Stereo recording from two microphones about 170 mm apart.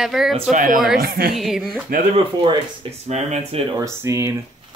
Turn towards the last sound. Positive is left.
turn(degrees=-15)  # may be behind; listen again after turning